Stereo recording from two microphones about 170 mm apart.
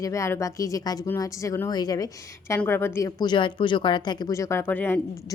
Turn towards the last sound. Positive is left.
turn(degrees=10)  # may be behind; listen again after turning